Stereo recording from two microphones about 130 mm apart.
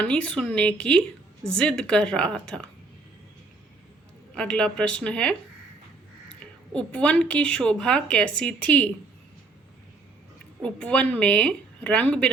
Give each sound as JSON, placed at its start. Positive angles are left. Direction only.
{"t": 0.0, "sound": "a woman's voice", "side_deg": 10}
{"t": 4.4, "sound": "a woman's voice", "side_deg": 5}
{"t": 6.4, "sound": "a woman's voice", "side_deg": 10}
{"t": 10.6, "sound": "a woman's voice", "side_deg": 10}